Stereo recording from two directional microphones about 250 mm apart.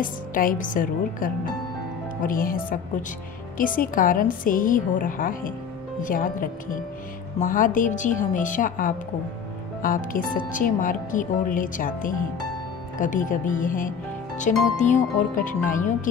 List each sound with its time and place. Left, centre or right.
0.0 s speech: left